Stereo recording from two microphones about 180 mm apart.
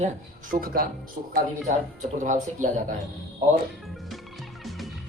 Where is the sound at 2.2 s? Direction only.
45° right (ahead or behind).